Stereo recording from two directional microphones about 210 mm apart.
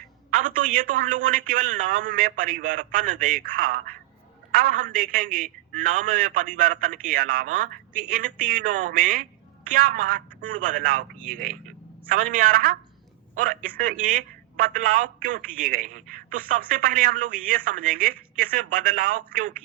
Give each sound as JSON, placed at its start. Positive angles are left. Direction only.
{"t": 0.3, "sound": "a man's voice", "side_deg": -40}